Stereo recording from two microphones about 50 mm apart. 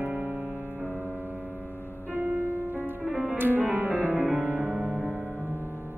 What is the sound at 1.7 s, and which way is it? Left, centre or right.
Music, left.